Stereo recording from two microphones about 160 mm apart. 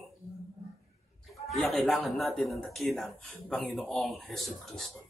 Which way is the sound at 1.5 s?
Centre (ahead or behind).